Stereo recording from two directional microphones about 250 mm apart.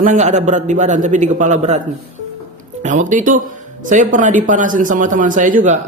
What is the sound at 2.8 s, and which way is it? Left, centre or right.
Speech, right.